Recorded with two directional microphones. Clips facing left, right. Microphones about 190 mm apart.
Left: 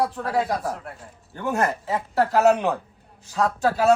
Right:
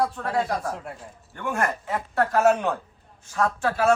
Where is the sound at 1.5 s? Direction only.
20° left (ahead or behind).